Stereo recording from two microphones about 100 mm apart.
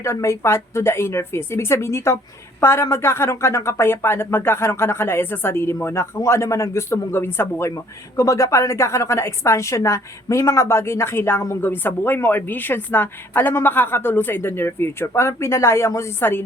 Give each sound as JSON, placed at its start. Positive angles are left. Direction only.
{"t": 0.0, "sound": "a woman's voice", "side_deg": 30}